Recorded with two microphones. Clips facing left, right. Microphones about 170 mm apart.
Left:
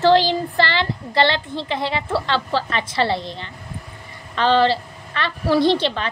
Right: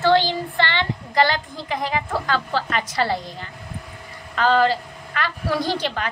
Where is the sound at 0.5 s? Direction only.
35° left (ahead or behind).